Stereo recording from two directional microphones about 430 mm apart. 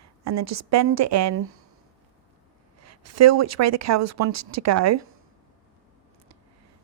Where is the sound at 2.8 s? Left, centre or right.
Right.